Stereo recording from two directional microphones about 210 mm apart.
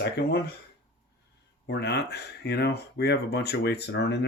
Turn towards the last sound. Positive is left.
turn(degrees=55)  # may be behind; listen again after turning